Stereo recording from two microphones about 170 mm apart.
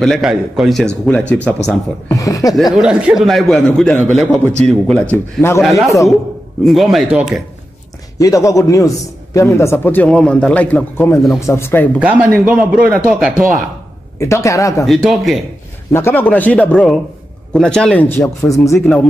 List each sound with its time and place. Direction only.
0.0 s a man's voice: centre (ahead or behind); by 2.5 s 20° left (ahead or behind)
2.7 s a man's voice: 5° right (ahead or behind); by 5.6 s 15° left (ahead or behind)
5.6 s a man's voice: centre (ahead or behind)
8.2 s a man's voice: 20° left (ahead or behind)
12.0 s a man's voice: 10° right (ahead or behind)
14.2 s a man's voice: 15° left (ahead or behind)
14.9 s a man's voice: centre (ahead or behind)
15.9 s a man's voice: 15° left (ahead or behind)